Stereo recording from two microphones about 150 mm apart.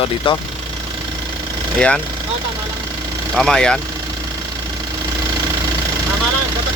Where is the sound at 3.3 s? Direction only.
5° left (ahead or behind).